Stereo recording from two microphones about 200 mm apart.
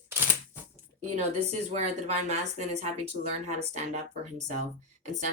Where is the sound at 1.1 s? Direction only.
35° right (ahead or behind).